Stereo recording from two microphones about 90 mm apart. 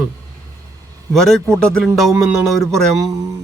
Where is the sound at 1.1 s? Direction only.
5° left (ahead or behind).